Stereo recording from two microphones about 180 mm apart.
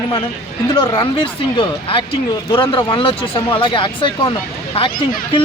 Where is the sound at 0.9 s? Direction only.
30° left (ahead or behind).